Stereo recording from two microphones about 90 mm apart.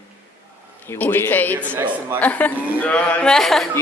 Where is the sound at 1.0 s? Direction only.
25° left (ahead or behind); by 3.6 s 5° left (ahead or behind).